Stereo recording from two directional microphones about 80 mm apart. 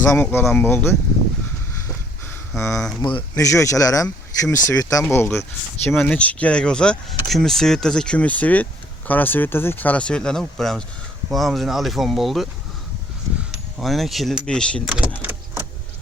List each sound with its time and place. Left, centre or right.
0.0 s speech: left
2.6 s speech: left
3.0 s speech: left
3.3 s speech: left
5.1 s speech: left
6.1 s speech: centre
13.7 s speech: centre
14.4 s speech: centre
14.8 s speech: centre